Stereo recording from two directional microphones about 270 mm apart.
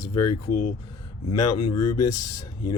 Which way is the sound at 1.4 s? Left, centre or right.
Left.